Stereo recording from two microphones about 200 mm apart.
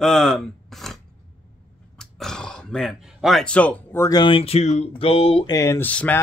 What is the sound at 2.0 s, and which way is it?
Speech, centre (ahead or behind).